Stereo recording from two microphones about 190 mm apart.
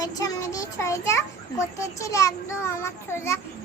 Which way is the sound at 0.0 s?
20° left (ahead or behind).